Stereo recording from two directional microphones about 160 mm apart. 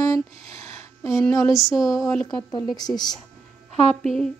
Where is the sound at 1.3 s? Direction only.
20° left (ahead or behind).